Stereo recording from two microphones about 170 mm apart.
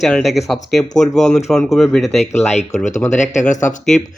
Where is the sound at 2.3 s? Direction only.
40° left (ahead or behind).